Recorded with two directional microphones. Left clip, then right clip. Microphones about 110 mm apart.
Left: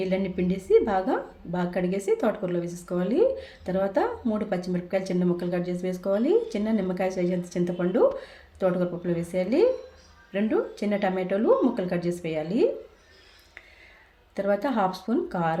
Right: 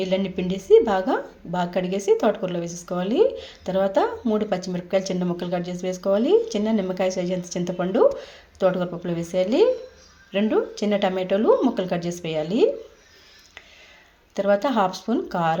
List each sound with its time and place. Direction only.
0.0 s a woman's voice: 20° right (ahead or behind)
14.3 s a woman's voice: 25° right (ahead or behind)